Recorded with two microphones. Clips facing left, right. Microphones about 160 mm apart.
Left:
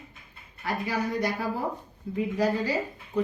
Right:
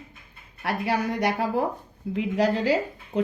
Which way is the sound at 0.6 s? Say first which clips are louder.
Right 3 dB; 70° right (ahead or behind).